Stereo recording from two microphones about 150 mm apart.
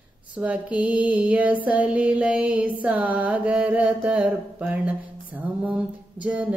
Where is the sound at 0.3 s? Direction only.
10° right (ahead or behind).